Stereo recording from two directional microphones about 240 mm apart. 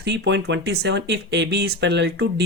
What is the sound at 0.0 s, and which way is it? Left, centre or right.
Speech, right.